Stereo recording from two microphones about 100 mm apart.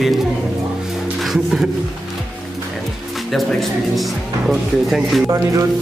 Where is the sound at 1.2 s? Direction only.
5° right (ahead or behind).